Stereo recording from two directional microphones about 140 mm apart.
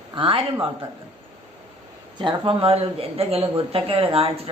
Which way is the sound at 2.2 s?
35° right (ahead or behind).